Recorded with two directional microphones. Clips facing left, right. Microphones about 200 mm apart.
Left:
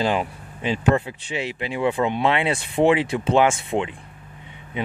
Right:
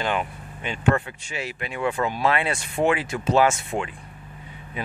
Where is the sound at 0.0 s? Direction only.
30° left (ahead or behind).